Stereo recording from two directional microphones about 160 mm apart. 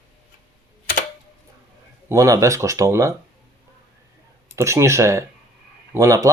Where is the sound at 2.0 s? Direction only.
20° right (ahead or behind).